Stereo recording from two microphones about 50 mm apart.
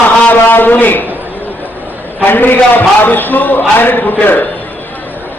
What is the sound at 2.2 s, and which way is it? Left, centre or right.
A man's voice, left.